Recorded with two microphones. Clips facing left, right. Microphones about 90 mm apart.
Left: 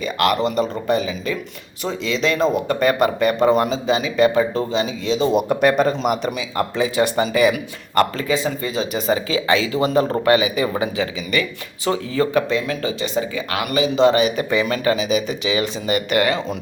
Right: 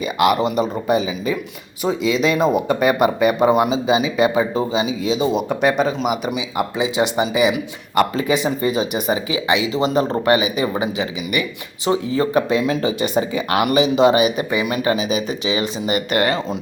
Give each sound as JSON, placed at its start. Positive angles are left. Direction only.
{"t": 0.0, "sound": "speech", "side_deg": -10}
{"t": 6.3, "sound": "speech", "side_deg": -15}
{"t": 14.9, "sound": "speech", "side_deg": -40}
{"t": 15.5, "sound": "speech", "side_deg": -20}